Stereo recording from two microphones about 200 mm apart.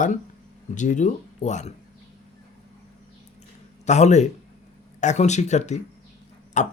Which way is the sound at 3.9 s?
35° left (ahead or behind).